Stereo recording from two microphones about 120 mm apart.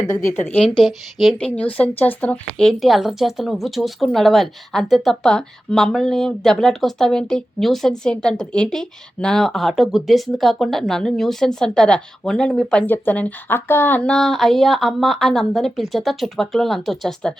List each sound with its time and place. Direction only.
0.3 s a woman's voice: 15° left (ahead or behind)
0.8 s speech: centre (ahead or behind)
1.5 s speech: 10° left (ahead or behind)